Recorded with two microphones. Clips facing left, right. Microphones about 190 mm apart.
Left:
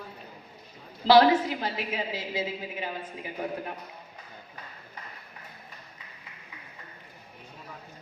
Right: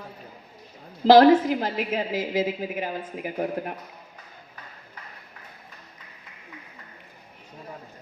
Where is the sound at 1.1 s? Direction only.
50° right (ahead or behind).